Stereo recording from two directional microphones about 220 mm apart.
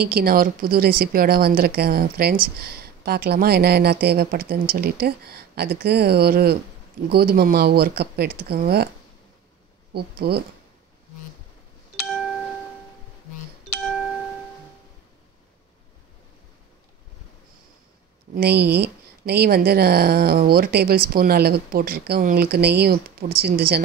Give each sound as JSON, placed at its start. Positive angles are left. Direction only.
{"t": 0.1, "sound": "speech", "side_deg": -40}
{"t": 9.9, "sound": "speech", "side_deg": -45}
{"t": 13.7, "sound": "music", "side_deg": 0}
{"t": 18.3, "sound": "speech", "side_deg": -45}